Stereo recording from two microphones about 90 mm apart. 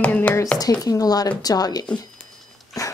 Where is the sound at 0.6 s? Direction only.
45° left (ahead or behind).